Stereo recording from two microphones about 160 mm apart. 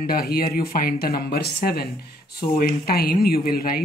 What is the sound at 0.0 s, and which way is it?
Speech, 70° left (ahead or behind).